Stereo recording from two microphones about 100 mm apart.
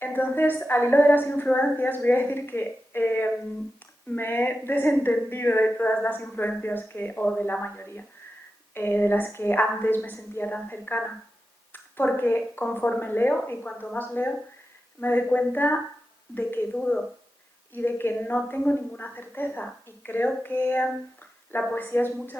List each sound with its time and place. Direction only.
0.0 s a woman's voice: 20° left (ahead or behind)
16.7 s a woman's voice: 10° left (ahead or behind)
17.7 s a woman's voice: 20° left (ahead or behind)